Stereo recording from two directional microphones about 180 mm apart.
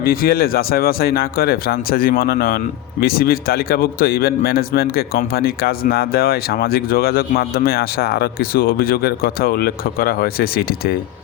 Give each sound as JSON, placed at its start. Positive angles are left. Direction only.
{"t": 0.0, "sound": "a man's voice", "side_deg": 55}